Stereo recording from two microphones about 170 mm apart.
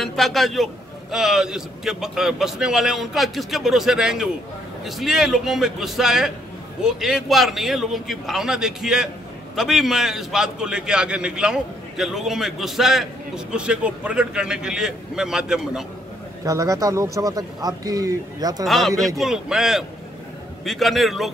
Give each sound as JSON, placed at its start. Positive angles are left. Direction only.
{"t": 0.0, "sound": "a man's voice", "side_deg": 0}
{"t": 16.4, "sound": "speech", "side_deg": -20}
{"t": 18.7, "sound": "a man's voice", "side_deg": 0}